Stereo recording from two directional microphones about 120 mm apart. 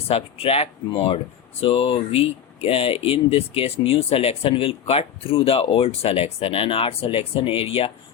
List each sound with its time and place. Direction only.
0.1 s speech: 55° left (ahead or behind)